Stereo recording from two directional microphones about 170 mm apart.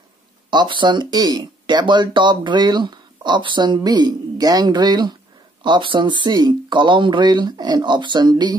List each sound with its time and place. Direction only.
0.5 s speech: 25° right (ahead or behind)